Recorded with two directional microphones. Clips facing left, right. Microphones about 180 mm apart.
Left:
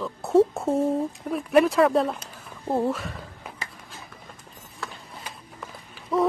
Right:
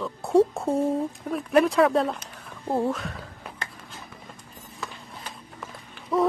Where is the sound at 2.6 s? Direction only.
Centre (ahead or behind).